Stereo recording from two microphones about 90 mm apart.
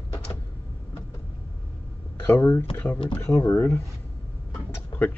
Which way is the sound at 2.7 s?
20° left (ahead or behind).